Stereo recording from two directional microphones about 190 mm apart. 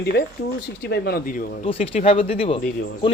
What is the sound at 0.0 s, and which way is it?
Speech, 60° left (ahead or behind).